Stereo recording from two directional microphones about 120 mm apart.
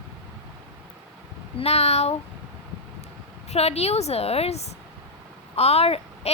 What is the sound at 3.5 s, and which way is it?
A woman's voice, 60° left (ahead or behind).